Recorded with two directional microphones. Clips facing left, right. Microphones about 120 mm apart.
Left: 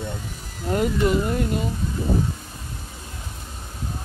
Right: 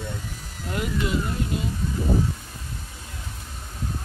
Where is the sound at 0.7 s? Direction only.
45° left (ahead or behind).